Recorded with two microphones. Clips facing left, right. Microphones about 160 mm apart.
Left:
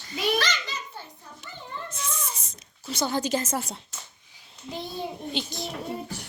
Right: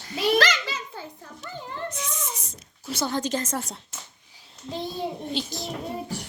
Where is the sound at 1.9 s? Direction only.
15° right (ahead or behind).